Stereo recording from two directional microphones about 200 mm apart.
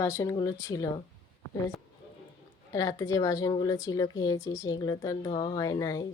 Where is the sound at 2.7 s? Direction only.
15° left (ahead or behind).